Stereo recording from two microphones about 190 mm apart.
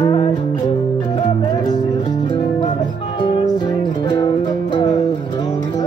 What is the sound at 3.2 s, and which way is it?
Music, 25° left (ahead or behind).